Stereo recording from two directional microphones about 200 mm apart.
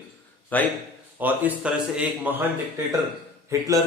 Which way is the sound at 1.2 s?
10° right (ahead or behind).